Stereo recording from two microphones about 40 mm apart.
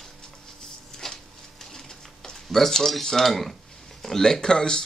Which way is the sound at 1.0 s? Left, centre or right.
Centre.